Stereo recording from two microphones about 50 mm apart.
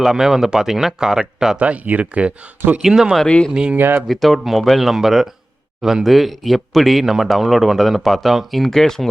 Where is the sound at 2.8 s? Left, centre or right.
Centre.